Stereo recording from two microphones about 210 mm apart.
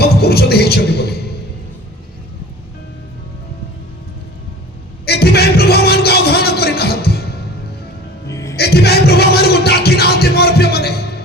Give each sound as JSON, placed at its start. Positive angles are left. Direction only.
{"t": 0.0, "sound": "music", "side_deg": 50}
{"t": 5.0, "sound": "music", "side_deg": 50}
{"t": 8.3, "sound": "music", "side_deg": 15}
{"t": 8.5, "sound": "music", "side_deg": 50}